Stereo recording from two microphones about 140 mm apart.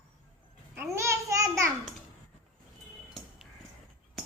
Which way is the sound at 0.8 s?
20° right (ahead or behind).